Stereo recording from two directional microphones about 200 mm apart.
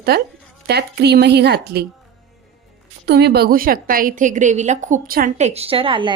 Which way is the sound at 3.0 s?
55° right (ahead or behind).